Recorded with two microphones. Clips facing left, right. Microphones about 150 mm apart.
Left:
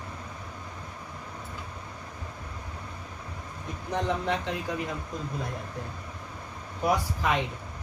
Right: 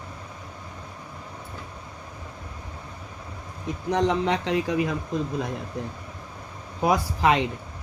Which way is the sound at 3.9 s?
90° right.